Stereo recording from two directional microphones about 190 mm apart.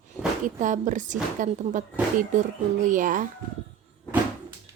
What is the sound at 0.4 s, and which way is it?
A woman's voice, 40° right (ahead or behind).